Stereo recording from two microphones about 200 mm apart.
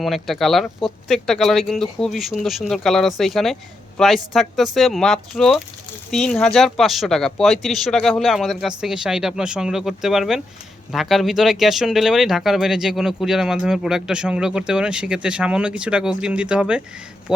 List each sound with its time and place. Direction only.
0.0 s speech: centre (ahead or behind)